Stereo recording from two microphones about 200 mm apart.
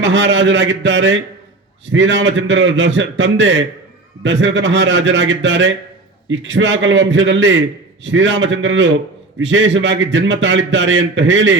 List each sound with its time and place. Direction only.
0.0 s a man's voice: 70° right (ahead or behind)